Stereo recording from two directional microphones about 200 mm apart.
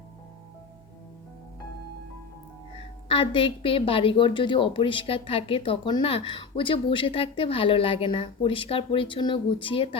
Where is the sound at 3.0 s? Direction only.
25° left (ahead or behind).